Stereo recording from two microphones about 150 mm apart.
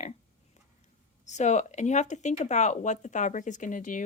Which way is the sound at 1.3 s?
50° left (ahead or behind).